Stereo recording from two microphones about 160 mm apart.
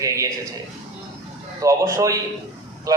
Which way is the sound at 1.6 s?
20° right (ahead or behind).